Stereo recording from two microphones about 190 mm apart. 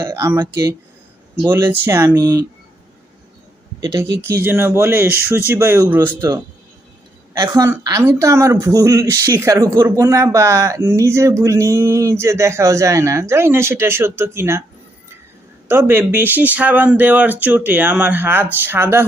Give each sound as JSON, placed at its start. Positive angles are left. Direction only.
{"t": 0.0, "sound": "speech", "side_deg": -15}
{"t": 4.2, "sound": "speech", "side_deg": -10}
{"t": 7.3, "sound": "speech", "side_deg": -20}
{"t": 15.6, "sound": "speech", "side_deg": -10}